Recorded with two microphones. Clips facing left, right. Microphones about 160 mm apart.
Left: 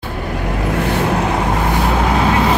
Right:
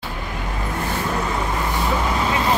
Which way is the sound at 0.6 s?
70° left (ahead or behind).